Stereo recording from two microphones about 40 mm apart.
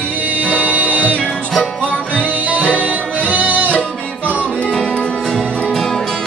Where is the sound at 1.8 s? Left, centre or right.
Left.